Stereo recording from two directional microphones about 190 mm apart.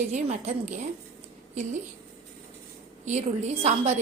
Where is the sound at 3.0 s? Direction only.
35° right (ahead or behind).